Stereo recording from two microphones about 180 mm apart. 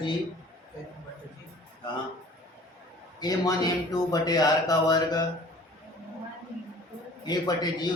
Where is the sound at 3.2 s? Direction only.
20° left (ahead or behind).